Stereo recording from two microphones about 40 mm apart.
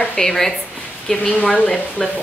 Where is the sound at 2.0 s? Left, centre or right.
Centre.